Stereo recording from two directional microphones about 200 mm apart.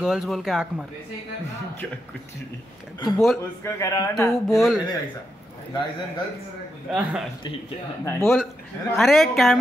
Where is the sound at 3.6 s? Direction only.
15° left (ahead or behind).